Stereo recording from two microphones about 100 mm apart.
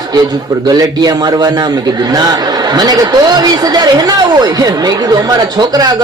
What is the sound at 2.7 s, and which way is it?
Speech, 40° right (ahead or behind).